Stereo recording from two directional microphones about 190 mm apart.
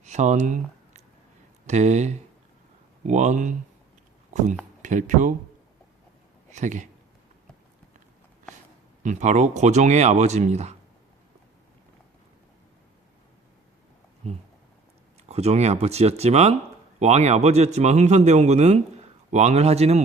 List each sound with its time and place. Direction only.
0.0 s a sound: 40° right (ahead or behind)
1.6 s speech: 35° right (ahead or behind)
4.8 s speech: 40° right (ahead or behind)
6.5 s speech: 40° right (ahead or behind)
9.0 s speech: 40° right (ahead or behind)
15.3 s speech: 35° right (ahead or behind)